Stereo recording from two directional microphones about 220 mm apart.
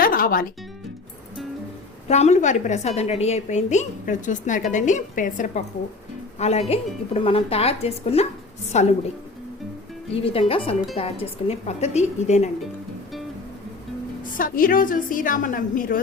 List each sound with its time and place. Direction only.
0.0 s music: 40° left (ahead or behind)
2.0 s a woman's voice: 30° left (ahead or behind)
10.2 s speech: 25° left (ahead or behind)
14.3 s a woman's voice: 40° left (ahead or behind)